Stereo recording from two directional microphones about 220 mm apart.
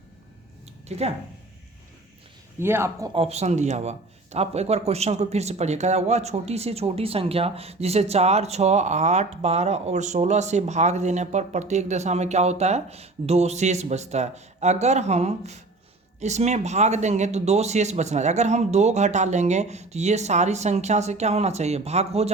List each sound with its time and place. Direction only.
0.9 s speech: 30° right (ahead or behind)
2.6 s speech: 10° right (ahead or behind)
3.2 s speech: 30° right (ahead or behind)